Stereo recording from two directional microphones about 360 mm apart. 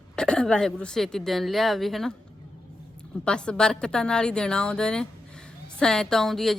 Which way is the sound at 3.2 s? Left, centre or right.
Centre.